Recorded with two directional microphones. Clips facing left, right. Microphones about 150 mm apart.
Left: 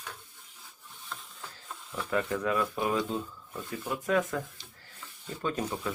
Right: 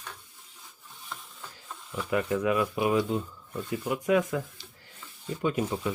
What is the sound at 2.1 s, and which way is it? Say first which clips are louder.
Speech: right 3 dB; 15° right (ahead or behind).